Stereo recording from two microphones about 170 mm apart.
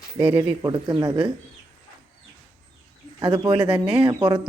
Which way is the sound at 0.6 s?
25° right (ahead or behind).